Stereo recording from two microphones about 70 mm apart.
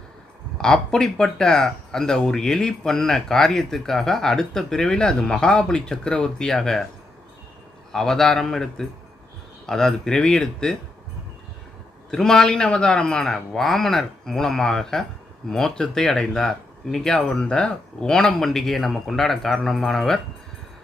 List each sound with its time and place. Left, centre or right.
0.6 s speech: centre
7.9 s speech: centre
12.1 s speech: centre